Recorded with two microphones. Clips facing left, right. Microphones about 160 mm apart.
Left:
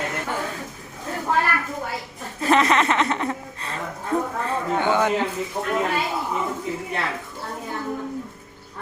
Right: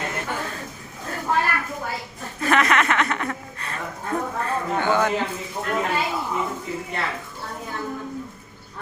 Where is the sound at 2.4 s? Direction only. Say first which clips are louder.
Left 2 dB; 30° left (ahead or behind).